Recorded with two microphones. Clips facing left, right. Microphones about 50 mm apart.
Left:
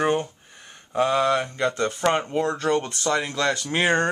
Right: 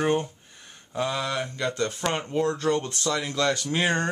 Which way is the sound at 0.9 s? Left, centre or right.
Left.